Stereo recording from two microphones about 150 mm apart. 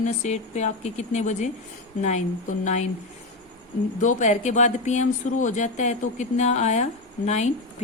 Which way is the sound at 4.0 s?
55° left (ahead or behind).